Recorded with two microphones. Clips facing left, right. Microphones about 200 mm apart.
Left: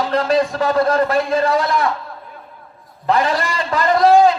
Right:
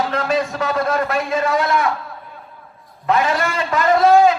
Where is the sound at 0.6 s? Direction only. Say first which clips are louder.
Left 4 dB; 35° left (ahead or behind).